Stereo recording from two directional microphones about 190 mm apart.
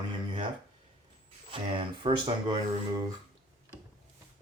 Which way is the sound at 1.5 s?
25° right (ahead or behind).